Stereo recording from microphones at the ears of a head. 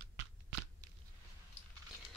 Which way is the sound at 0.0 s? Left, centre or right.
Right.